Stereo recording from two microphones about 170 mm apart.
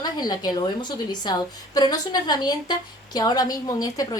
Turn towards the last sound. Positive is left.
turn(degrees=20)  # may be behind; listen again after turning